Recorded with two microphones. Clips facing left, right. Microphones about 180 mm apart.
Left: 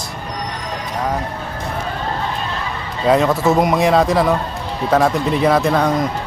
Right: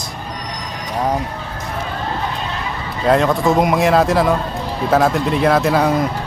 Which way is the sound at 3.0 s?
Centre (ahead or behind).